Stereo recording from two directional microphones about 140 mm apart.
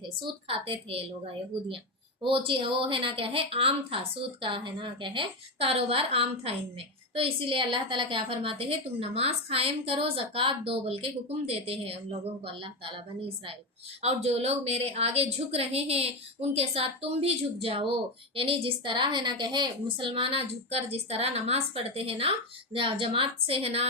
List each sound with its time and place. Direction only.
0.2 s a woman's voice: 40° right (ahead or behind)
2.2 s a woman's voice: 40° right (ahead or behind)